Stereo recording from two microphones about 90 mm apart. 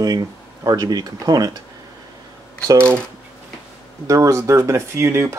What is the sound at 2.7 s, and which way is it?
Speech, 30° right (ahead or behind).